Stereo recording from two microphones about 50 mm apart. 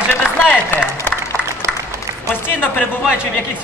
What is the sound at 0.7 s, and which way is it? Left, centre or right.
Speech, left.